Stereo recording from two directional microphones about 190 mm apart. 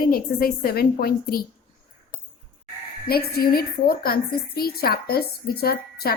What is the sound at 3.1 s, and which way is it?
A woman's voice, 55° left (ahead or behind).